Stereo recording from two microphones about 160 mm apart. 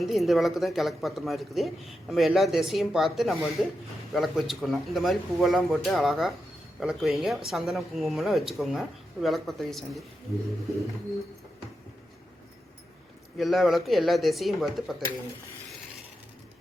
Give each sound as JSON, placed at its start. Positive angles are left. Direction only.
{"t": 0.0, "sound": "speech", "side_deg": 0}
{"t": 13.3, "sound": "speech", "side_deg": 0}